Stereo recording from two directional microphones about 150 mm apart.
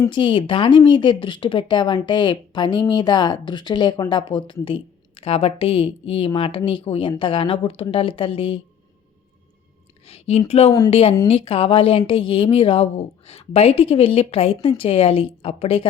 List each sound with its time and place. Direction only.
0.1 s speech: 35° left (ahead or behind)
10.1 s speech: 45° left (ahead or behind)